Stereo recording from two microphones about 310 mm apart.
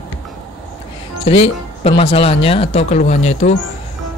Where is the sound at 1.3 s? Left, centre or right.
Centre.